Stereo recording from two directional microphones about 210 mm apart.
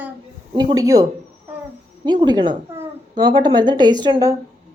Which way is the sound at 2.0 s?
20° right (ahead or behind).